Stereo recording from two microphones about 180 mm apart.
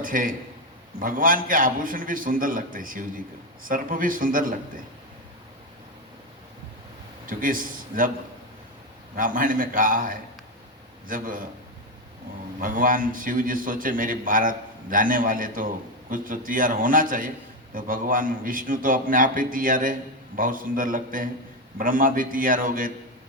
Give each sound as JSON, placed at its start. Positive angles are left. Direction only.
{"t": 0.0, "sound": "a man's voice", "side_deg": -50}
{"t": 7.3, "sound": "a man's voice", "side_deg": -50}
{"t": 9.1, "sound": "a man's voice", "side_deg": -50}
{"t": 12.6, "sound": "a man's voice", "side_deg": -50}